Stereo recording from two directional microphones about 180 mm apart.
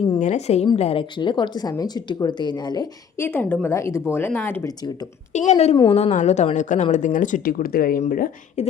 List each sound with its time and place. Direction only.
0.2 s a woman's voice: 40° left (ahead or behind); by 2.9 s 25° left (ahead or behind)
3.2 s speech: 10° left (ahead or behind)
5.3 s a woman's voice: 40° left (ahead or behind)